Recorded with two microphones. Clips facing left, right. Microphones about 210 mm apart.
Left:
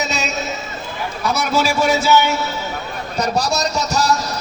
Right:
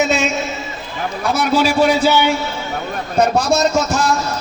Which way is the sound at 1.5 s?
45° left (ahead or behind).